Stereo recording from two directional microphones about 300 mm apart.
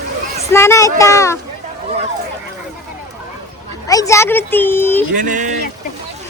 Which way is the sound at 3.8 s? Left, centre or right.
Centre.